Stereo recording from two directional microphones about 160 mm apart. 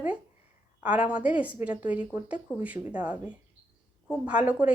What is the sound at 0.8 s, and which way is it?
A woman's voice, 10° right (ahead or behind).